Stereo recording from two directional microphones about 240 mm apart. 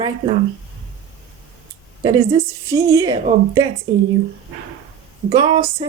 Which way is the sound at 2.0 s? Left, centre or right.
Centre.